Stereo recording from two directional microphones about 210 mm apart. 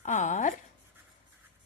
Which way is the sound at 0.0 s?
35° left (ahead or behind).